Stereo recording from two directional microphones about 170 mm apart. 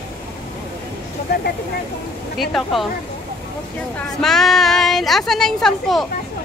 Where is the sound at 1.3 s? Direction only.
85° left.